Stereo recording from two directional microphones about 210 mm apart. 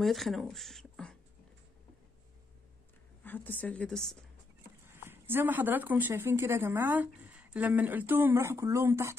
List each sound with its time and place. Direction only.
0.0 s speech: centre (ahead or behind)
3.3 s a woman's voice: 10° left (ahead or behind)
4.8 s speech: 10° right (ahead or behind)